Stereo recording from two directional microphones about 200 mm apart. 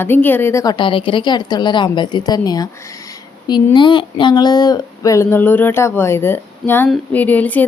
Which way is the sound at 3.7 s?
25° left (ahead or behind).